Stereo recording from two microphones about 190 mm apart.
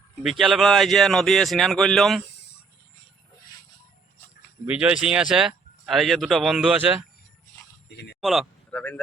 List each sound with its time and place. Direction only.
0.2 s speech: centre (ahead or behind)
4.6 s speech: 5° right (ahead or behind)
7.9 s speech: 60° left (ahead or behind)
8.2 s speech: centre (ahead or behind)